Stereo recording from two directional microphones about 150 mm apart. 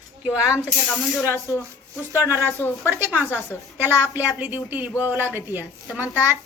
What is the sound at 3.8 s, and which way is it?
Speech, 10° right (ahead or behind).